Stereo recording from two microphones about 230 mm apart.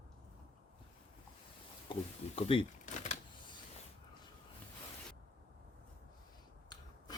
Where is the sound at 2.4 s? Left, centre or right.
Left.